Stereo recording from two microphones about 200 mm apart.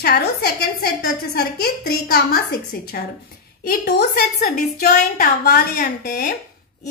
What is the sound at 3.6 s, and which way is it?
A woman's voice, 50° left (ahead or behind).